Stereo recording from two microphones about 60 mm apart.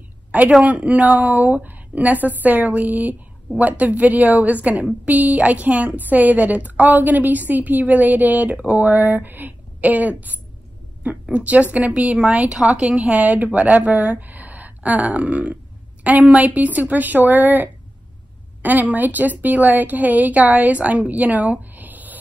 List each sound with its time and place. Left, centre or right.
0.3 s a woman's voice: right
11.3 s a woman's voice: right
14.2 s burping: right
18.6 s a woman's voice: right